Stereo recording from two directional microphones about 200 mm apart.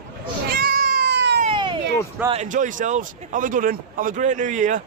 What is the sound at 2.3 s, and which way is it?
Speech, 35° right (ahead or behind).